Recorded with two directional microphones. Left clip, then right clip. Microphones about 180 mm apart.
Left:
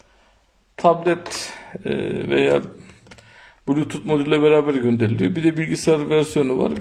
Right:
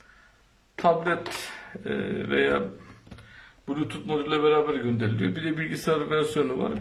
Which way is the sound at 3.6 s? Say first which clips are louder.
Left 9 dB; 35° left (ahead or behind).